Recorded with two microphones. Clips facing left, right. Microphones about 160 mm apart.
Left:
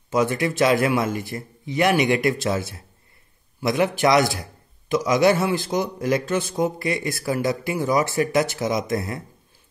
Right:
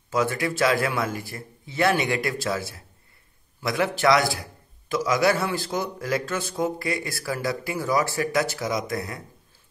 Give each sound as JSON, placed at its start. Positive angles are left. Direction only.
{"t": 0.1, "sound": "speech", "side_deg": 20}